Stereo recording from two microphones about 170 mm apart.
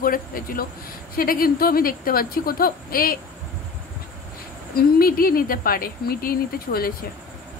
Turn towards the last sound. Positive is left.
turn(degrees=60)  # may be behind; listen again after turning